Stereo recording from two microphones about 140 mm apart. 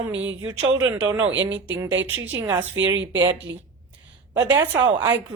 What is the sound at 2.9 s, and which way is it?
Speech, 30° right (ahead or behind).